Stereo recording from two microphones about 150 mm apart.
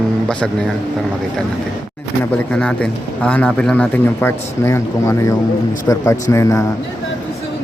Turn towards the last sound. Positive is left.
turn(degrees=20)  # may be behind; listen again after turning